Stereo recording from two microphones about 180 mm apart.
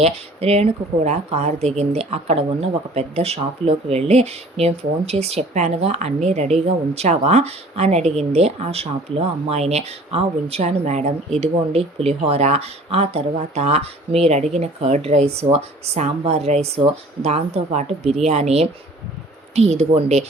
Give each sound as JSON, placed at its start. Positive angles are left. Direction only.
{"t": 0.0, "sound": "speech", "side_deg": -35}